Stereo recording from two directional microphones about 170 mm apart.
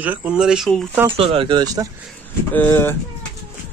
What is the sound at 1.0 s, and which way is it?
Speech, 35° right (ahead or behind).